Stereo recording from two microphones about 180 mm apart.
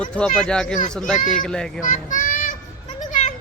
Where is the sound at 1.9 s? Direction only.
45° left (ahead or behind).